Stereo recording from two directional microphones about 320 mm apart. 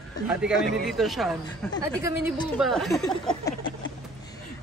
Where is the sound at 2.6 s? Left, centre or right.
Centre.